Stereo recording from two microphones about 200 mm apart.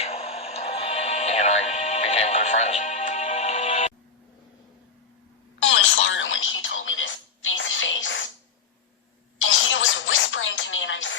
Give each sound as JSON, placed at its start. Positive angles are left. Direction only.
{"t": 0.0, "sound": "music", "side_deg": 30}
{"t": 5.5, "sound": "telephone", "side_deg": 70}
{"t": 9.4, "sound": "a sound", "side_deg": 75}